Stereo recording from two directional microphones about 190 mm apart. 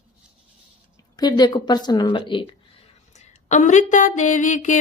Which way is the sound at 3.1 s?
40° left (ahead or behind).